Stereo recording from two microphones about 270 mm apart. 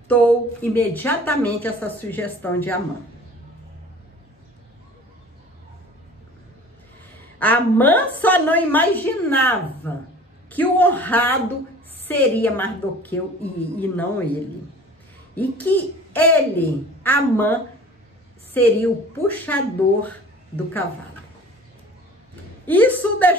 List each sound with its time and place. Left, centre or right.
0.1 s a woman's voice: centre
7.3 s a woman's voice: centre
15.3 s a woman's voice: centre
22.7 s a woman's voice: centre